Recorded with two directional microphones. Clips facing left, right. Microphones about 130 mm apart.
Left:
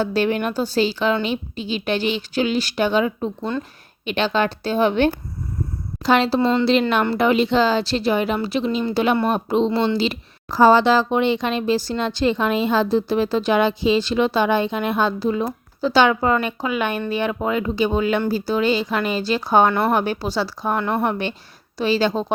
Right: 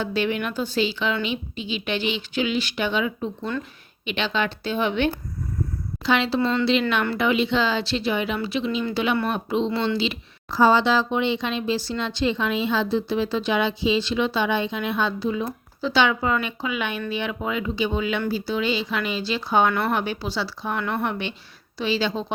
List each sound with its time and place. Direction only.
0.0 s a woman's voice: 40° left (ahead or behind)